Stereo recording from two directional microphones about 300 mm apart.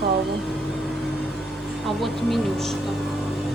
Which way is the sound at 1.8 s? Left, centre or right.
Centre.